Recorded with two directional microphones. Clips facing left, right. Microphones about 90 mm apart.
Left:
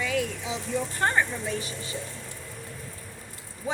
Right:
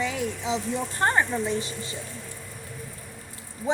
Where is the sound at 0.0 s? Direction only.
20° right (ahead or behind).